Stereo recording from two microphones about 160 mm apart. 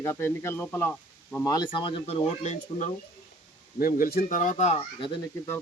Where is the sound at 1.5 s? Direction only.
25° left (ahead or behind); by 2.9 s 50° left (ahead or behind).